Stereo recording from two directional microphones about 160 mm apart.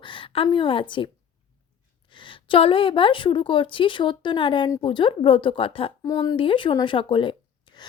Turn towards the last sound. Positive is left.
turn(degrees=30)  # may be behind; listen again after turning